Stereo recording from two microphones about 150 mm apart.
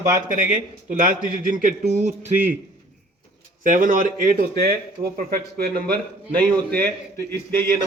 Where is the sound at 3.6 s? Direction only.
60° right (ahead or behind); by 5.2 s 90° right.